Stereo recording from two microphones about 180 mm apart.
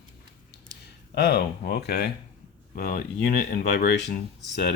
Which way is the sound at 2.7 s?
50° left (ahead or behind).